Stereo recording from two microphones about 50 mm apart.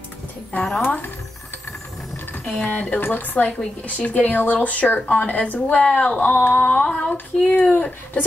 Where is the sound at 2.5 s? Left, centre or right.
Left.